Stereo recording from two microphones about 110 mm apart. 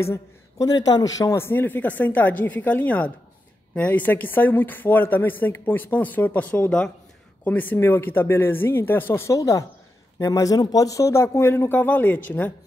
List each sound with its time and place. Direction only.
0.0 s a woman's voice: 25° left (ahead or behind)
0.7 s a woman's voice: 35° left (ahead or behind); by 12.5 s 15° left (ahead or behind)